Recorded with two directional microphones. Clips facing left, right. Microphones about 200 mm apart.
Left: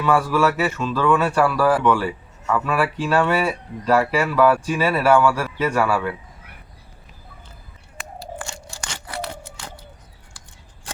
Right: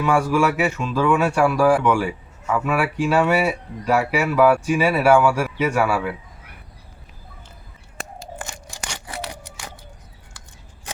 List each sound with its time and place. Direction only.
0.0 s speech: 10° right (ahead or behind)
8.4 s crunch: 15° right (ahead or behind)
9.3 s a sound: 15° right (ahead or behind)